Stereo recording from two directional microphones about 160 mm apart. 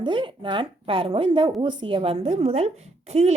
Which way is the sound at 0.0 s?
30° right (ahead or behind).